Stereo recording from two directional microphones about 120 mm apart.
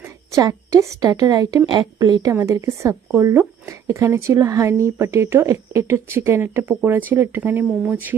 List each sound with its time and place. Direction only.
0.0 s speech: 25° right (ahead or behind)